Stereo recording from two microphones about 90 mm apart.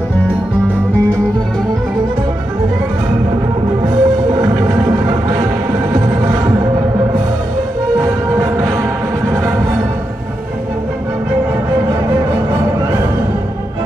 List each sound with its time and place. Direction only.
3.8 s music: 40° right (ahead or behind)
8.0 s music: 35° right (ahead or behind)